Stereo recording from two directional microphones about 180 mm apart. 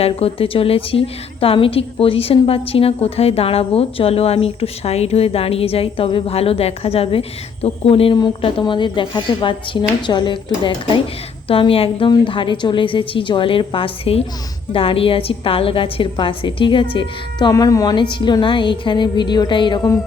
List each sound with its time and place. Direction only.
0.0 s a woman's voice: 30° left (ahead or behind)